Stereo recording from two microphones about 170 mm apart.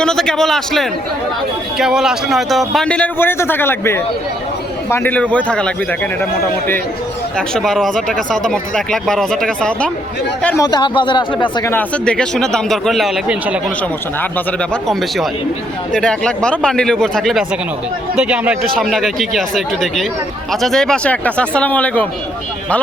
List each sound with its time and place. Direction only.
0.0 s a man's voice: 5° left (ahead or behind)
7.3 s speech: centre (ahead or behind)
10.6 s speech: 25° left (ahead or behind)
11.6 s speech: 10° left (ahead or behind); by 13.6 s 5° right (ahead or behind)
14.2 s a man's voice: 10° left (ahead or behind)